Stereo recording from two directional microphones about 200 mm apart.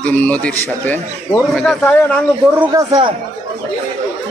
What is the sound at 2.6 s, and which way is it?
Speech, 15° right (ahead or behind).